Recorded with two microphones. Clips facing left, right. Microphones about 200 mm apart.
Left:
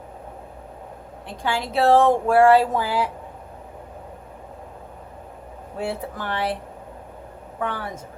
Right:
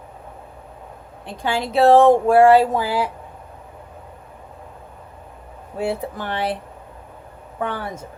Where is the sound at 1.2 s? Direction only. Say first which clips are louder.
Right 3 dB; 20° right (ahead or behind).